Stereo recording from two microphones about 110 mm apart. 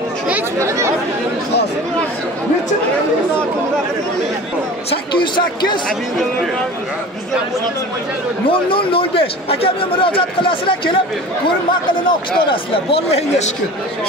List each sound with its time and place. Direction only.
0.6 s speech: 25° right (ahead or behind)
8.5 s a man's voice: 55° left (ahead or behind)
12.1 s a man's voice: 50° left (ahead or behind)